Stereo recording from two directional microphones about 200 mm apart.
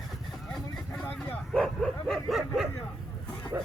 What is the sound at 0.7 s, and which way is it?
Bow-wow, 5° left (ahead or behind).